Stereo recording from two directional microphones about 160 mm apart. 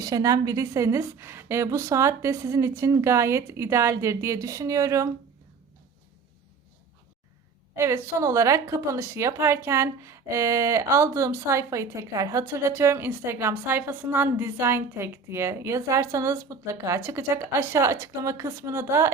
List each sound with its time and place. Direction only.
0.0 s a woman's voice: 20° right (ahead or behind)
7.8 s a woman's voice: 15° right (ahead or behind)